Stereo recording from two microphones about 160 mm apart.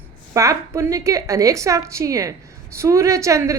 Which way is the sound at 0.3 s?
20° right (ahead or behind).